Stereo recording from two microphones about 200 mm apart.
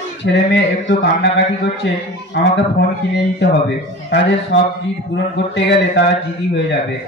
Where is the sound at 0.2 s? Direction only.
60° left (ahead or behind).